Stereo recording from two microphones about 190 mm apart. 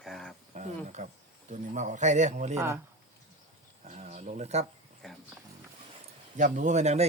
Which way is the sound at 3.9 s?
35° right (ahead or behind).